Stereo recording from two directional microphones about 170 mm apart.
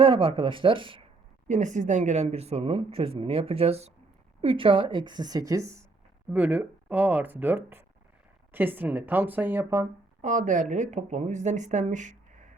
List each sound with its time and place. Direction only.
0.0 s speech: 30° right (ahead or behind)
1.5 s a woman's voice: 45° right (ahead or behind); by 9.8 s 15° right (ahead or behind)
10.2 s speech: 45° right (ahead or behind)